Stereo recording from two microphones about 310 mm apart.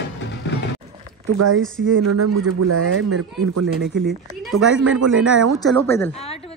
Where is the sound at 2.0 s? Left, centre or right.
Right.